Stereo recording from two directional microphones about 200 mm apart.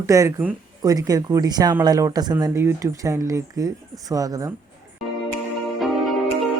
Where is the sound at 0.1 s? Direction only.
15° right (ahead or behind).